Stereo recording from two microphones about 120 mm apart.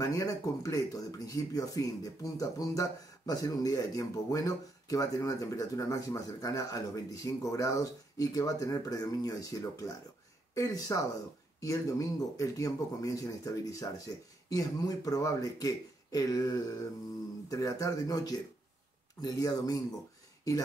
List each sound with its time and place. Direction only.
0.0 s speech: 30° left (ahead or behind)